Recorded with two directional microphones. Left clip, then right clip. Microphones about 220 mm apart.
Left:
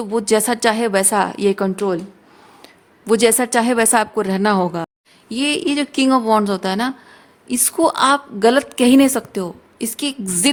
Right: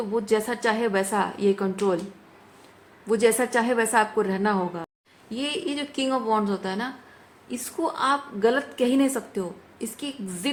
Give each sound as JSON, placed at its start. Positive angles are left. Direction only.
{"t": 0.1, "sound": "a woman's voice", "side_deg": 55}
{"t": 3.1, "sound": "a woman's voice", "side_deg": 50}